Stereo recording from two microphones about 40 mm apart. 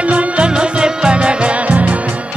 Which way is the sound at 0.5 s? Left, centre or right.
Centre.